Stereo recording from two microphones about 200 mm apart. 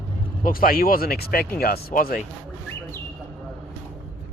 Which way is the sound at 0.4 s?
45° left (ahead or behind).